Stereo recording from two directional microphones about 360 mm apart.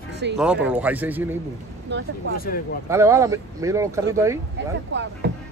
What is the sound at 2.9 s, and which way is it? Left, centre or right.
Speech, centre.